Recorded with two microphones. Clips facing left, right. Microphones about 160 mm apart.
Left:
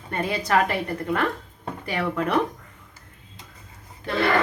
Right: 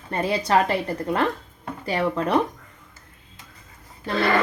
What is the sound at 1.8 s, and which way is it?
Speech, 30° right (ahead or behind).